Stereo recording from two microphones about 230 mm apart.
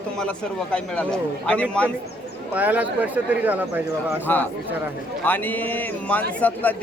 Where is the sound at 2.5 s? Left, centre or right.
Centre.